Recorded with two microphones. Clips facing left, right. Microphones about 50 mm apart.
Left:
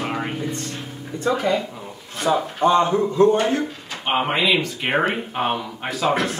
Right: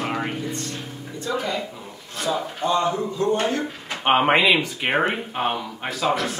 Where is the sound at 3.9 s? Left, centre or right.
Right.